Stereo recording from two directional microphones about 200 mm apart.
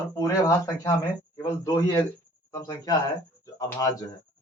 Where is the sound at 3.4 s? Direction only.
15° left (ahead or behind).